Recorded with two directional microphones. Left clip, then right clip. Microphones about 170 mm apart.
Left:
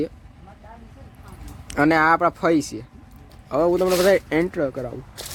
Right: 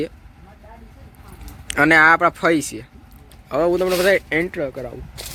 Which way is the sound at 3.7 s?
5° right (ahead or behind).